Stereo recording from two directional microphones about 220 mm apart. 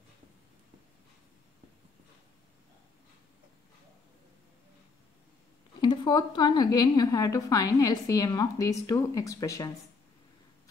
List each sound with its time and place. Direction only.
5.8 s a woman's voice: 20° left (ahead or behind)